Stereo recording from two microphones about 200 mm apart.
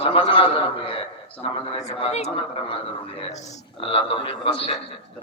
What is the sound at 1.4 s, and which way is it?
A man's voice, 25° left (ahead or behind).